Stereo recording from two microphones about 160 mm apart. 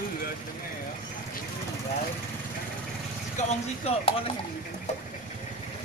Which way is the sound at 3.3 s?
40° left (ahead or behind).